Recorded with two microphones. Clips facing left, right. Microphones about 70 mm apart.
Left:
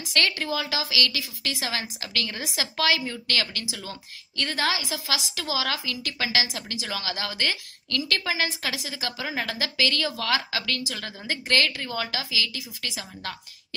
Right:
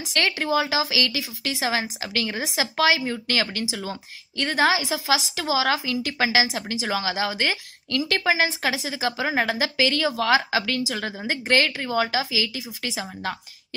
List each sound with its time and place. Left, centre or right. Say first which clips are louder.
0.0 s speech: right 2 dB; centre